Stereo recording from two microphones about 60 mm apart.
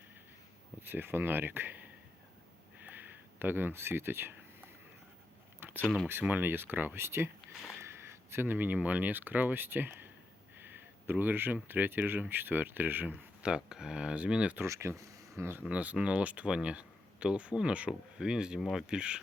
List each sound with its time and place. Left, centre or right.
0.8 s speech: right
2.8 s a sound: right
6.2 s speech: right
7.8 s a sound: right
8.4 s speech: right
10.6 s a sound: right
11.5 s speech: right
13.4 s speech: centre
14.6 s speech: right
15.1 s a sound: right
15.4 s speech: right
15.7 s speech: right